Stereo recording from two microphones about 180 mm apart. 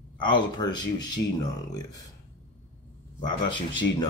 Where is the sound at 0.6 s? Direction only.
25° left (ahead or behind).